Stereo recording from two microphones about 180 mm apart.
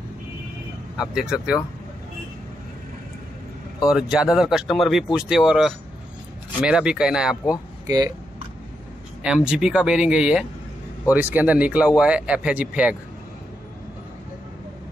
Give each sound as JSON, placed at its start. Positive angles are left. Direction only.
{"t": 0.9, "sound": "speech", "side_deg": -5}
{"t": 3.8, "sound": "speech", "side_deg": -5}
{"t": 7.8, "sound": "speech", "side_deg": -20}
{"t": 9.2, "sound": "speech", "side_deg": -5}